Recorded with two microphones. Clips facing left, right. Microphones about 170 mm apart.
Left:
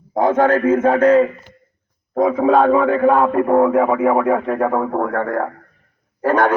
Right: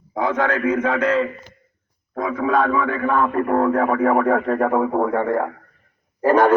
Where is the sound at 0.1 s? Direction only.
45° left (ahead or behind).